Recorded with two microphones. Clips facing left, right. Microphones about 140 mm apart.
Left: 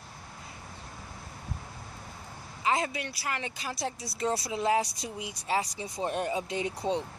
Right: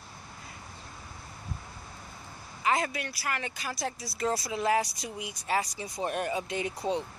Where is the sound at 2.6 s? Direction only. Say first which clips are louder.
Even; 25° left (ahead or behind).